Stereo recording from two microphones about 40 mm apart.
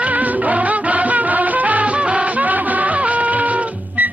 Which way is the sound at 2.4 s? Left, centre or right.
Right.